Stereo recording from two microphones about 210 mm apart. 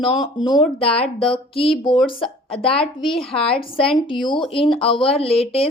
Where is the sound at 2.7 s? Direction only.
Centre (ahead or behind).